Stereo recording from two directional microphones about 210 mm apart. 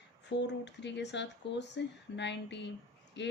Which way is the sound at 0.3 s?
55° left (ahead or behind).